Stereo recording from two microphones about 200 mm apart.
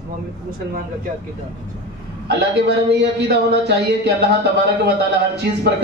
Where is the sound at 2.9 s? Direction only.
55° right (ahead or behind).